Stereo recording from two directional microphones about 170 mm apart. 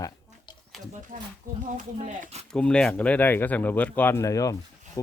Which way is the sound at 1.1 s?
45° right (ahead or behind).